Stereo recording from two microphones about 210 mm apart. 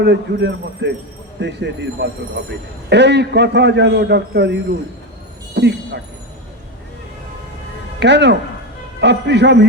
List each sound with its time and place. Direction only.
0.0 s a man's voice: 55° right (ahead or behind)
7.9 s a man's voice: 55° right (ahead or behind)